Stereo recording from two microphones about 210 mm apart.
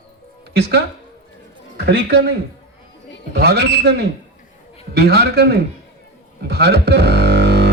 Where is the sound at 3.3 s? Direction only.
50° right (ahead or behind).